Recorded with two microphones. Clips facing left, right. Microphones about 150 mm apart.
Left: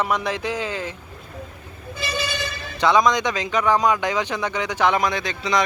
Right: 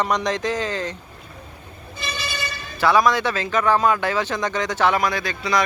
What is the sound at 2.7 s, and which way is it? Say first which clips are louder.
A man's voice: even; 20° left (ahead or behind).